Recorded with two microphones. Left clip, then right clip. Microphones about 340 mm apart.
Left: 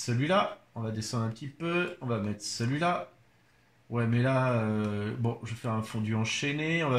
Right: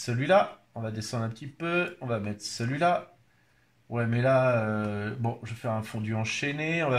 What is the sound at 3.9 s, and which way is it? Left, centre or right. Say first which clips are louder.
Speech: right 4 dB; right.